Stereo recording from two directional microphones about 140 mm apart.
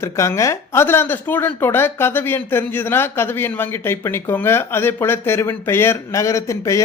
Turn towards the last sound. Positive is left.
turn(degrees=20)  # may be behind; listen again after turning